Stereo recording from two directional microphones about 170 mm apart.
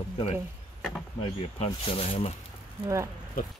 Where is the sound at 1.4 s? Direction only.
35° left (ahead or behind).